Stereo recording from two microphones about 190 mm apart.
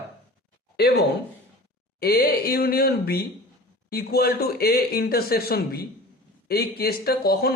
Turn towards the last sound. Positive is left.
turn(degrees=55)  # may be behind; listen again after turning